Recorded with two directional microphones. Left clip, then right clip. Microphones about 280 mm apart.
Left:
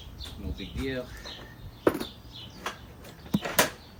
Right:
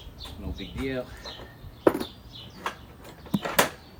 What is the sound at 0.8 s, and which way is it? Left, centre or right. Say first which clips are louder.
Speech: right 2 dB; right.